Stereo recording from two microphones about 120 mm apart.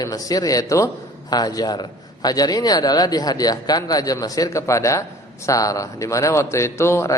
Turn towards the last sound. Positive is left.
turn(degrees=20)  # may be behind; listen again after turning